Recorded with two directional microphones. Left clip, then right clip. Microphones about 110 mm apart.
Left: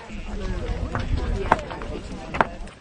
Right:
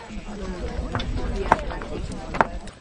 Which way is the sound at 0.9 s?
20° right (ahead or behind).